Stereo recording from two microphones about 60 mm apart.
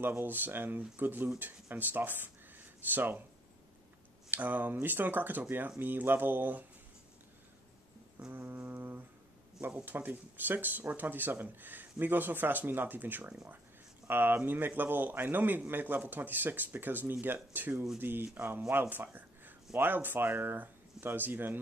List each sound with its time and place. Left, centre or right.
0.1 s speech: right
4.3 s speech: right
8.3 s brass instrument: right
9.8 s speech: right